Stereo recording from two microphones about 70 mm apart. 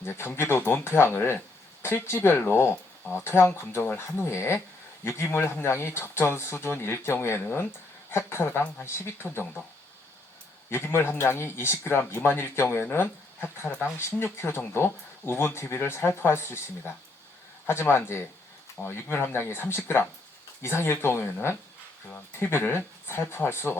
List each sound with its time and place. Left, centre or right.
0.0 s speech: left
10.7 s speech: left